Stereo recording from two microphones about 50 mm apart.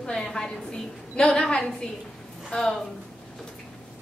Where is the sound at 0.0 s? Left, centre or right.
Centre.